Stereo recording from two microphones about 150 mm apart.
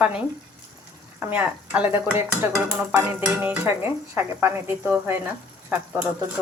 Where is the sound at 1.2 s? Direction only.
10° right (ahead or behind).